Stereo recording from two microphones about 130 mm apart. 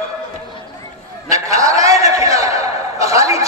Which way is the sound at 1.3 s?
25° right (ahead or behind).